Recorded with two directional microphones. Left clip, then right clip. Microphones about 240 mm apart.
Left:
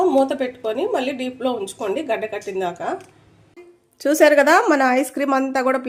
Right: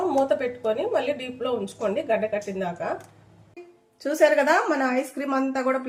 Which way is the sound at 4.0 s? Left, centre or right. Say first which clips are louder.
Left 6 dB; left.